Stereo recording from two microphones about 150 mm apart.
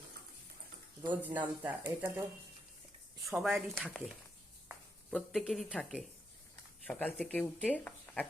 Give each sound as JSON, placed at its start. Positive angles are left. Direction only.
{"t": 1.2, "sound": "speech", "side_deg": -10}
{"t": 3.2, "sound": "speech", "side_deg": 0}